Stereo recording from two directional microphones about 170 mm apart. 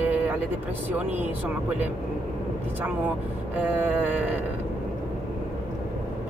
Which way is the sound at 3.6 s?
10° right (ahead or behind).